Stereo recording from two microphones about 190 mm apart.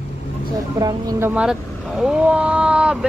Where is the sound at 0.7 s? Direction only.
20° right (ahead or behind).